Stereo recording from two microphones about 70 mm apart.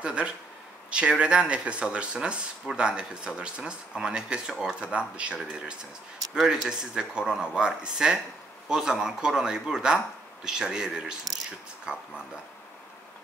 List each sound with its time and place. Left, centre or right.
0.0 s speech: centre
6.3 s speech: centre